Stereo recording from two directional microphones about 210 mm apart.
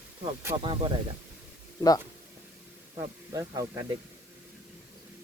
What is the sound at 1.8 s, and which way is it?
Speech, 20° left (ahead or behind).